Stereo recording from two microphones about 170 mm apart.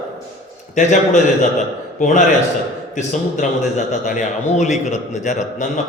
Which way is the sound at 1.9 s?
50° left (ahead or behind).